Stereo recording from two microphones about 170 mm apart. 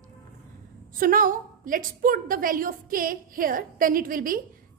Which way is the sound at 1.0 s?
55° right (ahead or behind).